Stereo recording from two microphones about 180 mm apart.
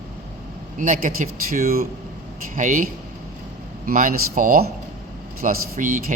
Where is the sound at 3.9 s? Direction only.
50° right (ahead or behind).